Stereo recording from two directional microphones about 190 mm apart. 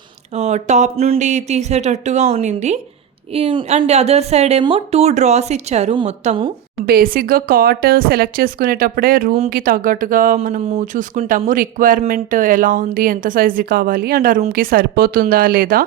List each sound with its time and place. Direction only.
0.3 s speech: 35° right (ahead or behind)
3.3 s a woman's voice: 25° right (ahead or behind)
6.8 s speech: 50° right (ahead or behind)